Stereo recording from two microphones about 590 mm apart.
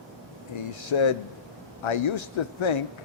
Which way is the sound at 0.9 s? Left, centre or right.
Left.